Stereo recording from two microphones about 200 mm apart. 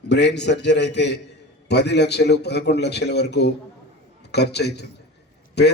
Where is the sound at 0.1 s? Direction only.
60° left (ahead or behind).